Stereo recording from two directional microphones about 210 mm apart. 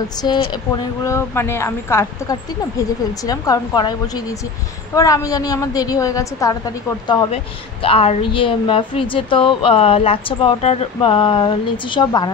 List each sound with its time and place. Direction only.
0.2 s a woman's voice: 20° left (ahead or behind)
7.8 s speech: 25° left (ahead or behind)